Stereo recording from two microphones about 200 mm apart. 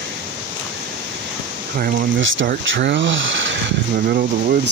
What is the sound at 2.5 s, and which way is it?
Speech, 55° right (ahead or behind).